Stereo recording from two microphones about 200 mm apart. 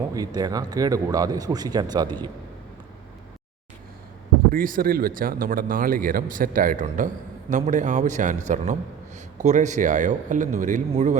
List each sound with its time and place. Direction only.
0.1 s speech: 20° right (ahead or behind)
4.5 s a man's voice: 45° right (ahead or behind)